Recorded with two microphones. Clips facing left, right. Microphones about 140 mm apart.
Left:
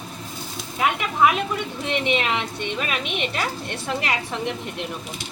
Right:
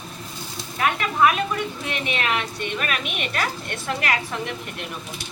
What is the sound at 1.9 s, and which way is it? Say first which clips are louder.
A woman's voice: left 5 dB; 20° left (ahead or behind).